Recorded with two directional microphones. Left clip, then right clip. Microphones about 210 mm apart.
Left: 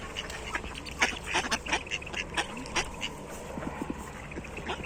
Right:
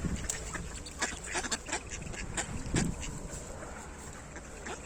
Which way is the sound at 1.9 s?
30° right (ahead or behind).